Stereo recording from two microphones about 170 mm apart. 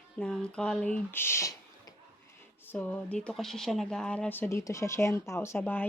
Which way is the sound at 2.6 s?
10° left (ahead or behind).